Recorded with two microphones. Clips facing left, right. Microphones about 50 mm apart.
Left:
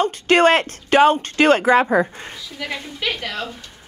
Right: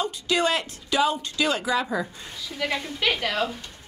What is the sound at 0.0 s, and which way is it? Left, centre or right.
Speech, left.